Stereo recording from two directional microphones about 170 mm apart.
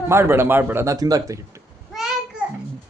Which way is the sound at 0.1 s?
15° right (ahead or behind).